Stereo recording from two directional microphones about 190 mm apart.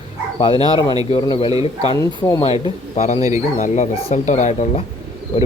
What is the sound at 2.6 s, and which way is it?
Speech, 35° left (ahead or behind).